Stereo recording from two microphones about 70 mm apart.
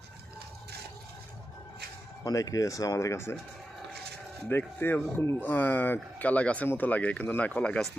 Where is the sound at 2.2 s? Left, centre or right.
Left.